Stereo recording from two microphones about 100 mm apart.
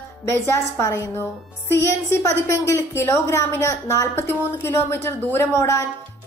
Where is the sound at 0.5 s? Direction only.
30° left (ahead or behind).